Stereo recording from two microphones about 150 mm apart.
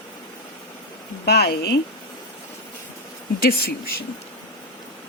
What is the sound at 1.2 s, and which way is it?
Speech, 90° left.